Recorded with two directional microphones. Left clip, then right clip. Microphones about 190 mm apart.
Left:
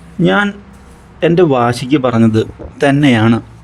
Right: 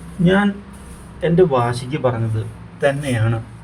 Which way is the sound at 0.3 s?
60° left (ahead or behind).